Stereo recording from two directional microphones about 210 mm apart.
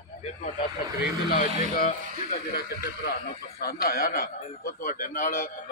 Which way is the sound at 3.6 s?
45° left (ahead or behind).